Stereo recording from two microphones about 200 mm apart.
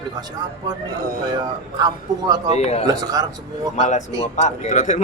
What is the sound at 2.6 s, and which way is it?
Speech, 30° left (ahead or behind).